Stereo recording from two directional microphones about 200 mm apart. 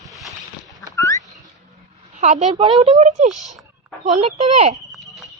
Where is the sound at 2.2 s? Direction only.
35° right (ahead or behind).